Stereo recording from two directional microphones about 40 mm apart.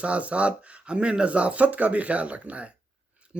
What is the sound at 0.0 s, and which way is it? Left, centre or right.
A man's voice, right.